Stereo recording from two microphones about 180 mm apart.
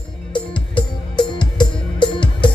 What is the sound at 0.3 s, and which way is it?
Music, 25° left (ahead or behind).